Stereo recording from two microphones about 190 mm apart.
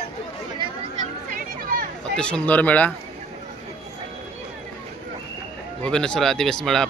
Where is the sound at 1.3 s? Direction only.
50° right (ahead or behind).